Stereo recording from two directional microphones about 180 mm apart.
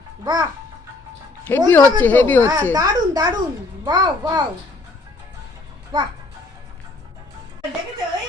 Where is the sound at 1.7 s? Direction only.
10° left (ahead or behind).